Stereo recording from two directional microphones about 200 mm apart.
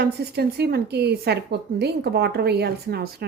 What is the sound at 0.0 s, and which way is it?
A woman's voice, 55° right (ahead or behind).